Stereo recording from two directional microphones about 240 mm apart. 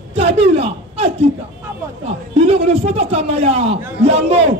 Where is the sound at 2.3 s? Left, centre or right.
Right.